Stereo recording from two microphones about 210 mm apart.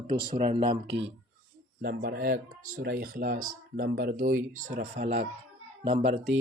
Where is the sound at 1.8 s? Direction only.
45° right (ahead or behind).